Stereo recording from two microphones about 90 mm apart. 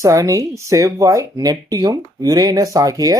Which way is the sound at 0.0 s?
35° right (ahead or behind).